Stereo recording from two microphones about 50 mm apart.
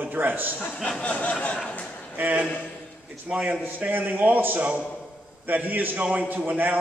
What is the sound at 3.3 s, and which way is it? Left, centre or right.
A man's voice, right.